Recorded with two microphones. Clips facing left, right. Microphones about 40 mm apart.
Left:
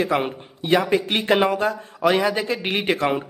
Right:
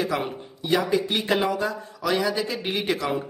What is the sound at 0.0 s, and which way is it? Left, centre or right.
A man's voice, left.